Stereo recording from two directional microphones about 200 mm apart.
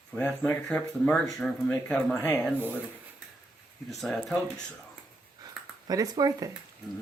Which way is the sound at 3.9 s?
Centre (ahead or behind).